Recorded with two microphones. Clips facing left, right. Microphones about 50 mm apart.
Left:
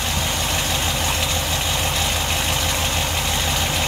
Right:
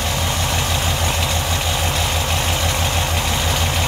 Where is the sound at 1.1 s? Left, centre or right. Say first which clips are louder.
Right 2 dB; centre.